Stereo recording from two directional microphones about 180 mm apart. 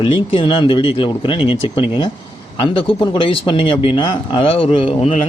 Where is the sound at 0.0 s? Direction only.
30° left (ahead or behind).